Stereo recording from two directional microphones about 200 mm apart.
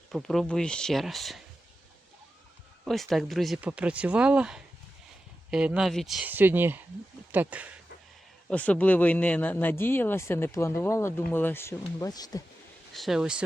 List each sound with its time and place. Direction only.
0.1 s speech: centre (ahead or behind)
2.8 s speech: centre (ahead or behind)
8.4 s speech: 5° left (ahead or behind)
12.9 s speech: centre (ahead or behind)